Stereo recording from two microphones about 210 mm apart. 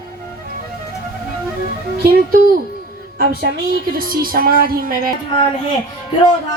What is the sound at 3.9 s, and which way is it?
A woman's voice, 45° right (ahead or behind).